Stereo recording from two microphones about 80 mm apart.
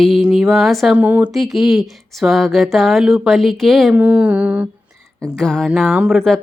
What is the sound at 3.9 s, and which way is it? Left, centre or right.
Mantra, centre.